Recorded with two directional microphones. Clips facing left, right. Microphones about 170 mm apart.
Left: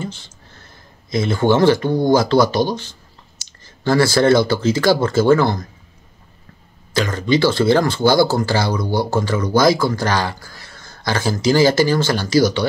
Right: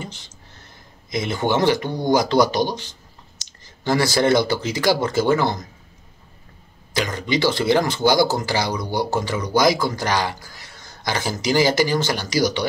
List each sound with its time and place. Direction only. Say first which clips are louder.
0.0 s speech: left 6 dB; 20° right (ahead or behind)
6.9 s speech: left 5 dB; 15° right (ahead or behind)